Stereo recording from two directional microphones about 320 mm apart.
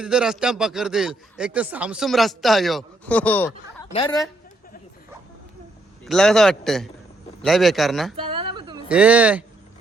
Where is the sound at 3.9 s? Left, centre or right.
Centre.